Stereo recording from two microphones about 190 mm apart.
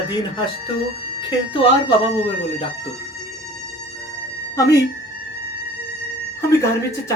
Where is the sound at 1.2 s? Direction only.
25° left (ahead or behind).